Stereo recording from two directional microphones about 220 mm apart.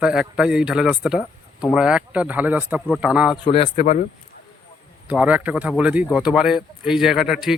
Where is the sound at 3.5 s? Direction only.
25° left (ahead or behind).